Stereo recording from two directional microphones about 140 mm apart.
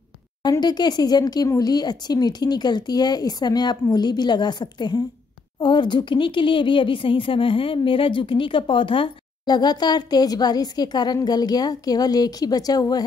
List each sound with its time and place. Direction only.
0.4 s speech: 30° left (ahead or behind)